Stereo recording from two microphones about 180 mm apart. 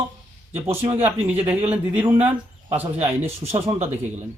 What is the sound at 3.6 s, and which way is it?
Speech, 35° right (ahead or behind).